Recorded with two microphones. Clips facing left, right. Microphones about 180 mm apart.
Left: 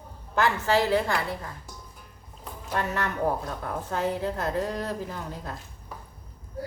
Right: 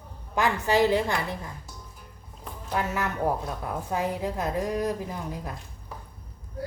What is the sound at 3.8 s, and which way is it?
A woman's voice, 10° right (ahead or behind).